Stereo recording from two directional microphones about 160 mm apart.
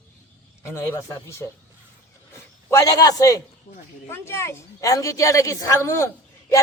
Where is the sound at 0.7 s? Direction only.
15° left (ahead or behind).